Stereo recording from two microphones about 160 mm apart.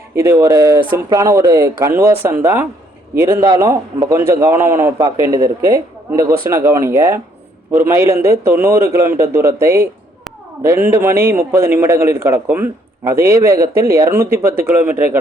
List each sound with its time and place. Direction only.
0.2 s a man's voice: 15° right (ahead or behind)